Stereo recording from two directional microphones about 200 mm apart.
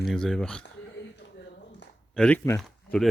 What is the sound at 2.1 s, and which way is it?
Speech, 5° left (ahead or behind).